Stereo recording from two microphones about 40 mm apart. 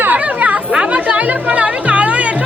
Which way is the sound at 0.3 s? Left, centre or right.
Right.